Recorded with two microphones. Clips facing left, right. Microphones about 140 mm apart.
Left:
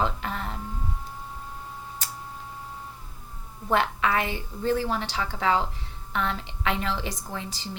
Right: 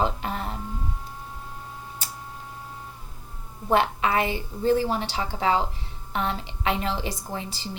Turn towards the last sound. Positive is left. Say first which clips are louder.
# right 2 dB
turn(degrees=-30)  # may be behind; listen again after turning